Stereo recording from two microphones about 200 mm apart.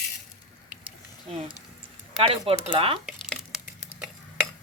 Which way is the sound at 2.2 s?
30° right (ahead or behind).